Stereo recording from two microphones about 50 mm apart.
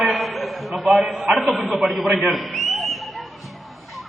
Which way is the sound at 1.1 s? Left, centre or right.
Centre.